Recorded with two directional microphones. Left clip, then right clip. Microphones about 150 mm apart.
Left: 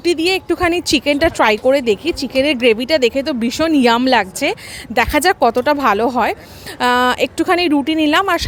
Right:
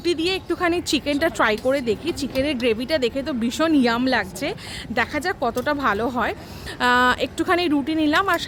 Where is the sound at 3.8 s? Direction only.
50° left (ahead or behind).